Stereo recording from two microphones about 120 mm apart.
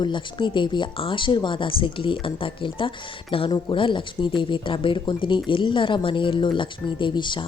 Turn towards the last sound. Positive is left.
turn(degrees=40)  # may be behind; listen again after turning